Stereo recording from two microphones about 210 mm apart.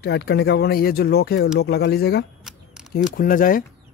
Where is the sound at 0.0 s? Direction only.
50° left (ahead or behind).